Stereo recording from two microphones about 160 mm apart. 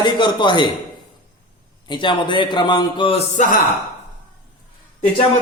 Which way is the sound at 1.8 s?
30° left (ahead or behind).